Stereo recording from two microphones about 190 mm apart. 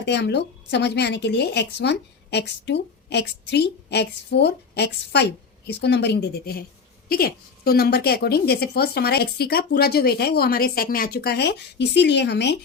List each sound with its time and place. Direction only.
0.0 s a woman's voice: 65° left (ahead or behind)